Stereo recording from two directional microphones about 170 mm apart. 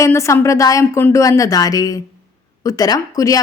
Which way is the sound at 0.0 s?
15° left (ahead or behind).